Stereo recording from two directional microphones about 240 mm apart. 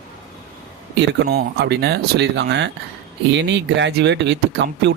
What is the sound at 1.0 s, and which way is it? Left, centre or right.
Speech, right.